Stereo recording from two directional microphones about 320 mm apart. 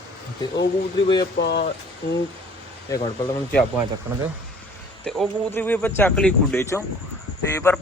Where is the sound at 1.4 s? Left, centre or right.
Left.